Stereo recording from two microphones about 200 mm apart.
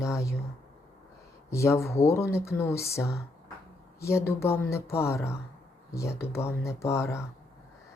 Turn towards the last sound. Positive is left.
turn(degrees=15)  # may be behind; listen again after turning